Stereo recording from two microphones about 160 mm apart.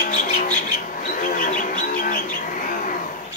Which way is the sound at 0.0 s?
60° left (ahead or behind).